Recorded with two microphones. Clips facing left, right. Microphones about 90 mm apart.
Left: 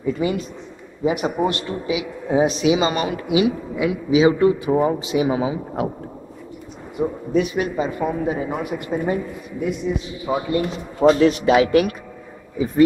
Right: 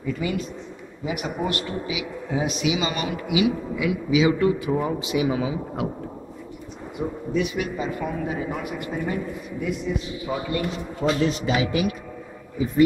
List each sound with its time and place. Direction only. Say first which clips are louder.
0.0 s a man's voice: left 5 dB; 30° left (ahead or behind)
7.0 s speech: left 6 dB; 30° left (ahead or behind)
7.3 s a man's voice: left 5 dB; 40° left (ahead or behind)
8.0 s speech: left 5 dB; 25° left (ahead or behind)
10.2 s a man's voice: left 6 dB; 30° left (ahead or behind)
11.1 s a man's voice: left 8 dB; 60° left (ahead or behind)